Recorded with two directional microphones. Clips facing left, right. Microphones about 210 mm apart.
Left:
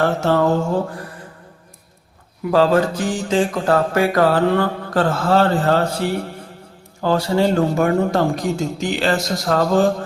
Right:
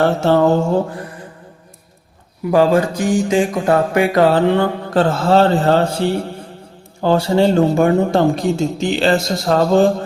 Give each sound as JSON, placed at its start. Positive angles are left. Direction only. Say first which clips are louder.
{"t": 0.0, "sound": "mantra", "louder": "right 3 dB", "side_deg": -25}
{"t": 2.5, "sound": "mantra", "louder": "right 2 dB", "side_deg": -15}